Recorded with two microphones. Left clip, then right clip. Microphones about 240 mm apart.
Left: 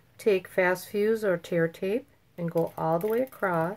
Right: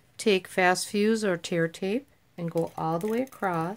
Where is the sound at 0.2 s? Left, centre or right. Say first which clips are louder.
Right 1 dB; right.